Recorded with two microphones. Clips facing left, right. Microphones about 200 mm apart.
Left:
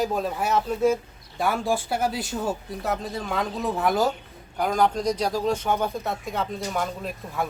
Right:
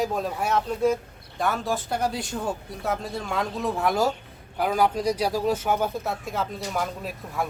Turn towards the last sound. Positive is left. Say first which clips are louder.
# left 1 dB
turn(degrees=0)  # may be behind; listen again after turning